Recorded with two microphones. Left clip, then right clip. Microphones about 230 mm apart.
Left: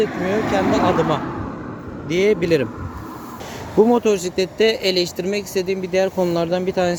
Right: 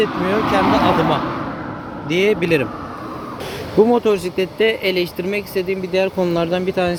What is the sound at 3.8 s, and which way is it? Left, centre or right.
Speech, centre.